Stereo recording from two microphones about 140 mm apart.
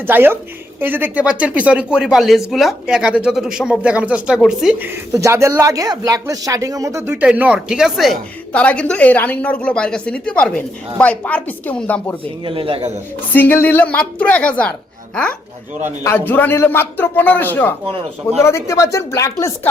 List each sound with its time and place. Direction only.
0.0 s speech: 15° right (ahead or behind)
5.1 s a woman's voice: 20° right (ahead or behind); by 12.1 s 10° left (ahead or behind)
12.5 s a man's voice: 40° right (ahead or behind)
13.3 s a woman's voice: 15° left (ahead or behind)